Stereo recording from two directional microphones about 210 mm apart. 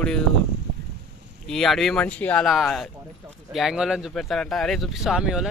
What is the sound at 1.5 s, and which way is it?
Speech, centre (ahead or behind).